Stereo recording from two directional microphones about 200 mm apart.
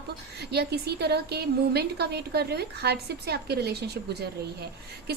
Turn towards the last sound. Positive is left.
turn(degrees=-55)  # may be behind; listen again after turning